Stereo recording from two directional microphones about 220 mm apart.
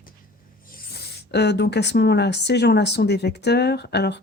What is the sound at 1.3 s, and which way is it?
Speech, 50° left (ahead or behind).